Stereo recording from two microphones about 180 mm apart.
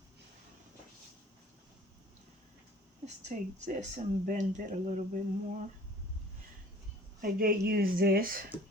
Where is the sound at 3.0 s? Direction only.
40° right (ahead or behind).